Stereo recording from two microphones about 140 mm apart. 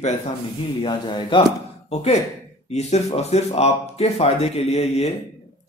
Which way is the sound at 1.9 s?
50° left (ahead or behind).